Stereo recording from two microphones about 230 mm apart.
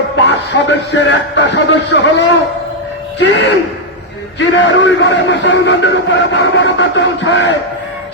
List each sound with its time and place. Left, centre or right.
0.2 s a man's voice: left